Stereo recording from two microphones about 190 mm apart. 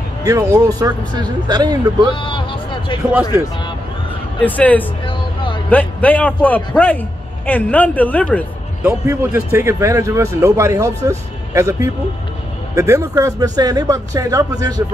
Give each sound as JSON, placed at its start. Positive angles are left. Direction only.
{"t": 0.2, "sound": "speech", "side_deg": -15}
{"t": 2.1, "sound": "a sound", "side_deg": 25}
{"t": 4.4, "sound": "a man's voice", "side_deg": 10}
{"t": 5.0, "sound": "a sound", "side_deg": 25}
{"t": 5.7, "sound": "a man's voice", "side_deg": 10}
{"t": 8.8, "sound": "a man's voice", "side_deg": -10}